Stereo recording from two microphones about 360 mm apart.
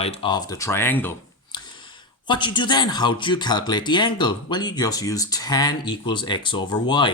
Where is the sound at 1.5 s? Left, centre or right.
Centre.